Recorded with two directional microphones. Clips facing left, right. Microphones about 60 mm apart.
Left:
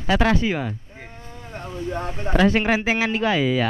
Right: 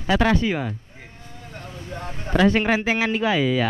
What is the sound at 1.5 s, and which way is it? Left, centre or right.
Boat, left.